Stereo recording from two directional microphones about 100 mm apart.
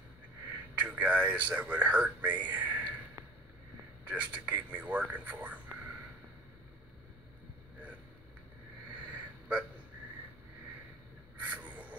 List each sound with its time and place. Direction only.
0.7 s speech: 15° right (ahead or behind)
4.1 s speech: 15° right (ahead or behind)
11.3 s a sound: 15° right (ahead or behind)